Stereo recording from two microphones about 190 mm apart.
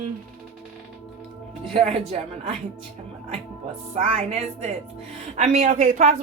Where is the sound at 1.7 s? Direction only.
35° right (ahead or behind).